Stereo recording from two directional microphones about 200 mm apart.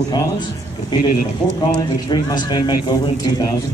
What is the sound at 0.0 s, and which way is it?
Speech, 20° left (ahead or behind).